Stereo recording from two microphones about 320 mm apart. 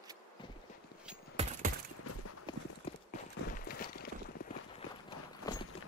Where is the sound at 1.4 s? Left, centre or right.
Centre.